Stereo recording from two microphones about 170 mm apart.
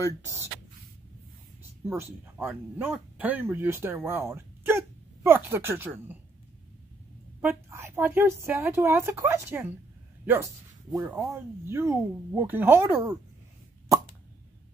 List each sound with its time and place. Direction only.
0.2 s a woman's voice: 15° right (ahead or behind)
1.9 s a woman's voice: 10° right (ahead or behind)
7.4 s a woman's voice: 15° right (ahead or behind)